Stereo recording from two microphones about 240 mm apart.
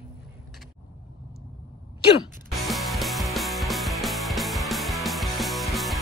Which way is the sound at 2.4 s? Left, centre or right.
Centre.